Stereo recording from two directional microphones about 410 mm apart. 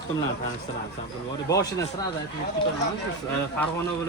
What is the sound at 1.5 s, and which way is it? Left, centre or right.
Speech, centre.